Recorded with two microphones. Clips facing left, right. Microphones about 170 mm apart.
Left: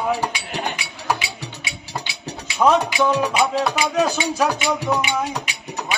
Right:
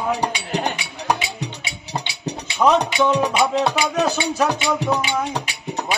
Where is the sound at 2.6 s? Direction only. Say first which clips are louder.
Even; centre (ahead or behind).